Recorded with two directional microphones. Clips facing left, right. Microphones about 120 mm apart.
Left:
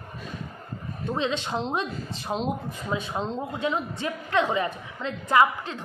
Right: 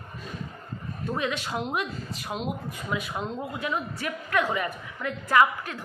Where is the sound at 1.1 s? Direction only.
25° left (ahead or behind).